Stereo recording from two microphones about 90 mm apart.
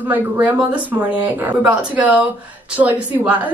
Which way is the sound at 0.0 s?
20° right (ahead or behind).